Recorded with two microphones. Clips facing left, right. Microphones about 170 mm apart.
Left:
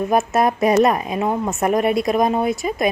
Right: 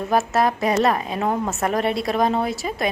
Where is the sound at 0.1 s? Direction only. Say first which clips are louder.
Even; 20° left (ahead or behind).